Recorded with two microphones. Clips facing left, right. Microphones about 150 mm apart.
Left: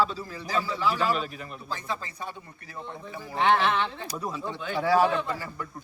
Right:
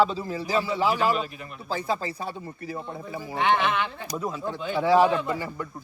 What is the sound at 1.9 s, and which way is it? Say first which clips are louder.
Speech: right 6 dB; 35° right (ahead or behind).